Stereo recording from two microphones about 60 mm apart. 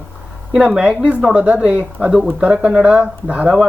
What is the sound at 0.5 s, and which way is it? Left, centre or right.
Speech, centre.